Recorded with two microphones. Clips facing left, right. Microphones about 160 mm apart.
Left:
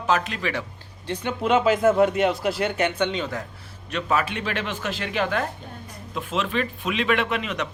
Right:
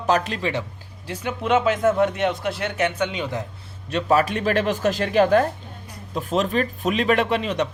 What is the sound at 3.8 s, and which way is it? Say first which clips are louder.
Speech: right 5 dB; 35° right (ahead or behind).